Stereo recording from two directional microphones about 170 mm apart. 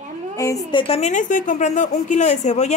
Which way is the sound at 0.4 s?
20° left (ahead or behind).